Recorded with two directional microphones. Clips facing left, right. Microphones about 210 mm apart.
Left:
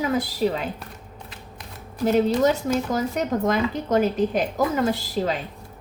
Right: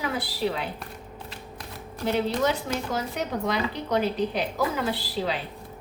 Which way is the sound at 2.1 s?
40° left (ahead or behind).